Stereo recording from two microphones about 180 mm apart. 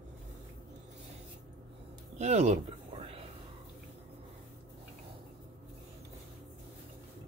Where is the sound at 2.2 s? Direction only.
40° right (ahead or behind).